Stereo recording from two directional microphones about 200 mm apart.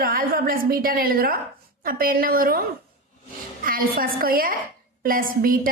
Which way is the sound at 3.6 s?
45° right (ahead or behind).